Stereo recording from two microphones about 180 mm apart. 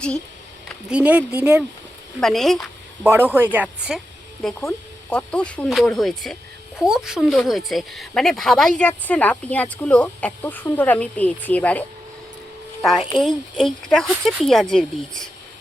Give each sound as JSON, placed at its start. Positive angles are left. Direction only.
{"t": 0.9, "sound": "speech", "side_deg": -5}
{"t": 3.0, "sound": "speech", "side_deg": -10}
{"t": 4.6, "sound": "speech", "side_deg": 5}
{"t": 13.1, "sound": "speech", "side_deg": 0}